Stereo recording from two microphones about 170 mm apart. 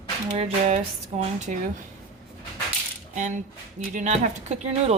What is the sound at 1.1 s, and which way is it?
Speech, 45° right (ahead or behind).